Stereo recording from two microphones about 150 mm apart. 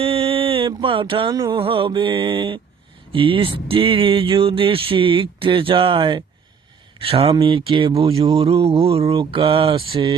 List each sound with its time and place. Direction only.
0.0 s mantra: 40° right (ahead or behind)
1.4 s speech: 30° right (ahead or behind)